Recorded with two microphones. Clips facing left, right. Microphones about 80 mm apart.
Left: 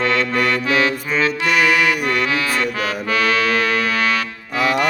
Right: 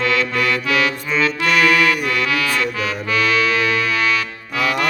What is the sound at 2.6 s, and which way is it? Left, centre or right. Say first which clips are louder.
Music: left 1 dB; left.